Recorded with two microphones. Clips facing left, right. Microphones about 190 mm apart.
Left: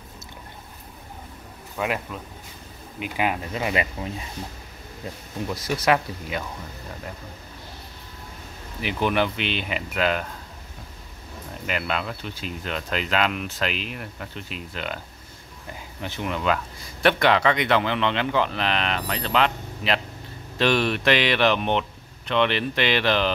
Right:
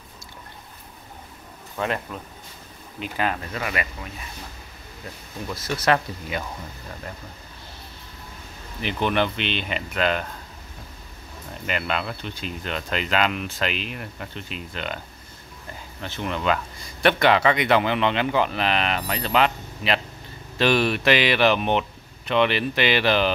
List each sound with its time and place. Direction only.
1.8 s speech: 10° left (ahead or behind)
5.5 s speech: 10° left (ahead or behind)
8.8 s speech: 5° left (ahead or behind)
11.6 s speech: centre (ahead or behind)
16.0 s speech: 10° left (ahead or behind); by 23.3 s 5° right (ahead or behind)